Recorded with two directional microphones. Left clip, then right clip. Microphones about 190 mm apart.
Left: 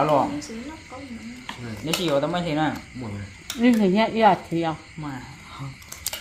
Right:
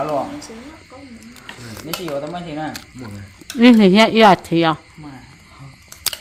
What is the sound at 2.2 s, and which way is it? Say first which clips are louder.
Speech: left 3 dB; 60° left (ahead or behind).